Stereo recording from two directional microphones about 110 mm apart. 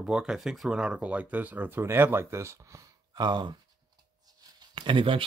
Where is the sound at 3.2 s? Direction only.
45° right (ahead or behind).